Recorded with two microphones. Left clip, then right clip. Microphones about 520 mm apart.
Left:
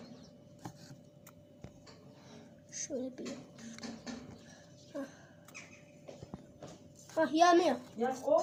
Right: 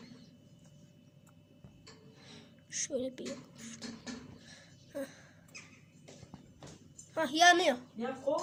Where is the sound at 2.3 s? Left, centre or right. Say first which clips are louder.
Right 5 dB; centre.